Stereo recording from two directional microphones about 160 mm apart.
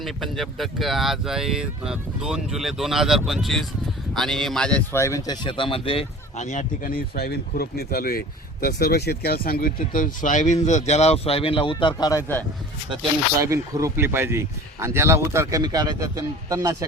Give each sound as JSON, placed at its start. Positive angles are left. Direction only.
{"t": 0.0, "sound": "speech", "side_deg": 0}
{"t": 4.9, "sound": "speech", "side_deg": 20}
{"t": 13.4, "sound": "speech", "side_deg": -20}